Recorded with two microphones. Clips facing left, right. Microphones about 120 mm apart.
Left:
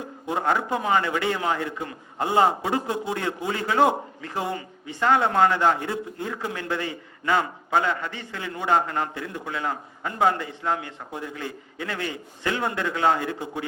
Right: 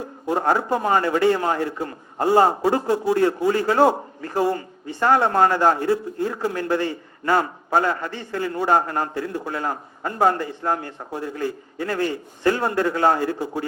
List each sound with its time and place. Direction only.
0.3 s a man's voice: 35° right (ahead or behind)